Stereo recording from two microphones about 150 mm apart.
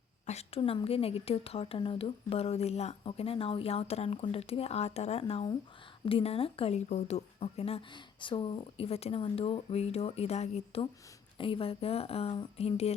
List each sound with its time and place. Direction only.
0.3 s a woman's voice: 45° left (ahead or behind)